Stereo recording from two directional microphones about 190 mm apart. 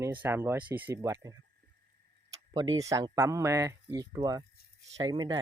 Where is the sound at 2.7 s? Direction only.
20° right (ahead or behind).